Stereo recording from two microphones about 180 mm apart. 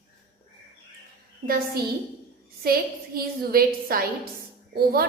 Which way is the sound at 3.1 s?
55° right (ahead or behind).